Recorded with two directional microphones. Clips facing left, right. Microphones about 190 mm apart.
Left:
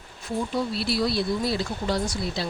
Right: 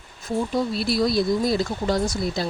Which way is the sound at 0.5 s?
45° right (ahead or behind).